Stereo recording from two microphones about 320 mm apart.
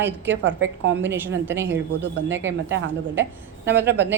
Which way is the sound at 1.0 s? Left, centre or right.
Centre.